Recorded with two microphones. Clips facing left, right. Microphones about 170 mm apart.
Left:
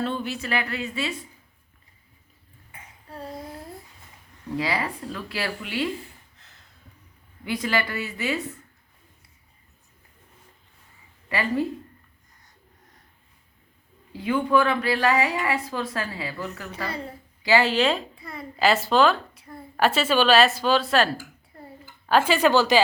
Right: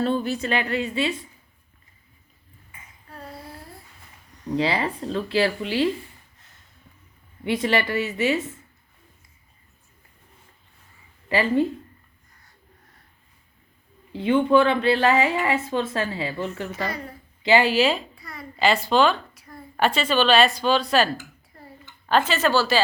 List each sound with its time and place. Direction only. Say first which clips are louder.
0.0 s speech: right 5 dB; 40° right (ahead or behind)
0.4 s speech: right 4 dB; 30° right (ahead or behind)
4.5 s speech: right 4 dB; 25° right (ahead or behind)
7.4 s speech: right 4 dB; 25° right (ahead or behind)
11.3 s speech: right 4 dB; 25° right (ahead or behind)
14.1 s speech: right 4 dB; 25° right (ahead or behind)
16.8 s a woman's voice: right 1 dB; 30° left (ahead or behind)
17.4 s speech: right 2 dB; 15° right (ahead or behind)
18.1 s a sound: left 2 dB; 25° left (ahead or behind)
18.6 s speech: even; centre (ahead or behind)